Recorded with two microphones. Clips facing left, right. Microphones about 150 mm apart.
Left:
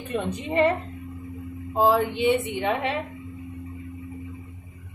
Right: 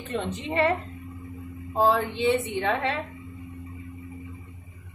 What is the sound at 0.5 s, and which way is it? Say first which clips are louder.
Speech: left 3 dB; 20° left (ahead or behind).